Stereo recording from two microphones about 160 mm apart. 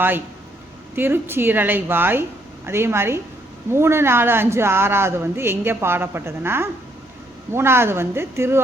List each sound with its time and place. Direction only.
0.9 s speech: 15° right (ahead or behind)